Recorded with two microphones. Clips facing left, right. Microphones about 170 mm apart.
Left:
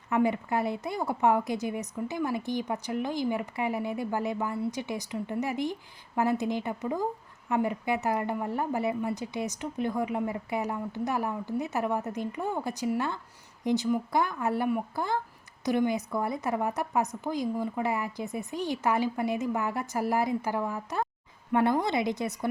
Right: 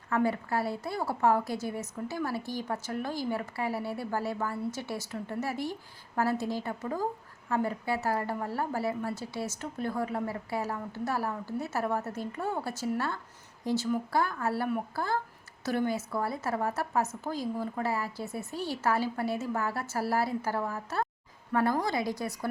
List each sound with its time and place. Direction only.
0.1 s a woman's voice: 20° left (ahead or behind)